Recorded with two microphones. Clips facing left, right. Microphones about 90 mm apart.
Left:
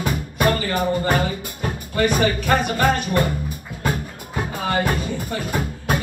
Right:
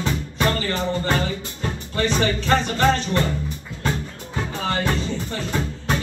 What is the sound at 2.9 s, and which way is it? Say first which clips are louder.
Music: left 2 dB; 15° left (ahead or behind).